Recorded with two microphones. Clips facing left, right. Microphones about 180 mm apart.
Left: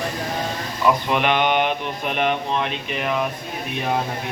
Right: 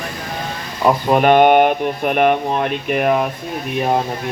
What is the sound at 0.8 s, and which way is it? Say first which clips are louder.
Speech: right 6 dB; 45° right (ahead or behind).